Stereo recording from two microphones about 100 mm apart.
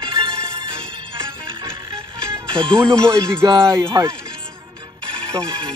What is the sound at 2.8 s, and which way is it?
Speech, 30° right (ahead or behind).